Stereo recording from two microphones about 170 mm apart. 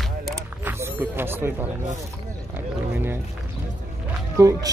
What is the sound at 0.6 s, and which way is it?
Speech, 15° right (ahead or behind).